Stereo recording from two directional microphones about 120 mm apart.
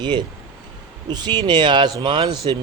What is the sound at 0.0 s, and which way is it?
Speech, 40° right (ahead or behind).